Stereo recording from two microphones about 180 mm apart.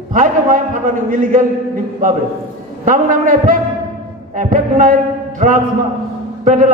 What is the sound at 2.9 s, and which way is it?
A man's voice, 50° right (ahead or behind).